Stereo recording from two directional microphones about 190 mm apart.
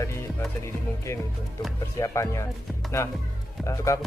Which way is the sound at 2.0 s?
15° left (ahead or behind).